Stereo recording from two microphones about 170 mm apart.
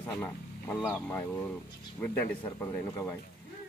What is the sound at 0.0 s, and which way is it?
Vehicle, 15° left (ahead or behind).